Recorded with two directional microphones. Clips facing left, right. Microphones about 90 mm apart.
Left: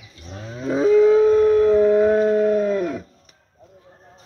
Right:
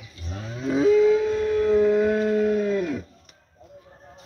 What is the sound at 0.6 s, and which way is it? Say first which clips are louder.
Livestock: left 3 dB; 30° left (ahead or behind).